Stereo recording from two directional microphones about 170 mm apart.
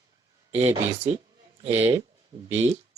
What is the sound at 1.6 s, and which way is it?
Speech, 15° right (ahead or behind).